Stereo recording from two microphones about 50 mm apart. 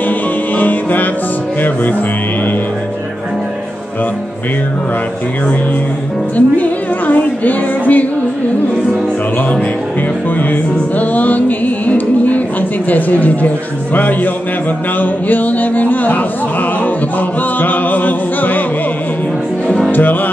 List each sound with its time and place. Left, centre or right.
0.6 s music: left
6.3 s music: left
10.5 s music: left
12.9 s speech: left
17.6 s music: left
19.9 s speech: left